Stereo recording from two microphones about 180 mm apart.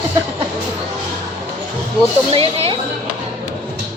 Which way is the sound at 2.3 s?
35° right (ahead or behind).